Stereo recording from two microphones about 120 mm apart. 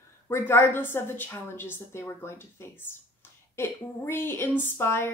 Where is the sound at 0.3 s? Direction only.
20° left (ahead or behind).